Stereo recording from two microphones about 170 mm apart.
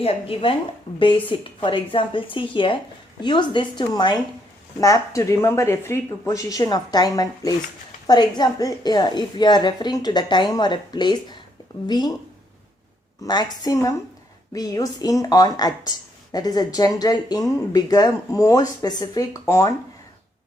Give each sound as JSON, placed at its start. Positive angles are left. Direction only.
{"t": 0.0, "sound": "a woman's voice", "side_deg": 35}
{"t": 13.2, "sound": "a woman's voice", "side_deg": 25}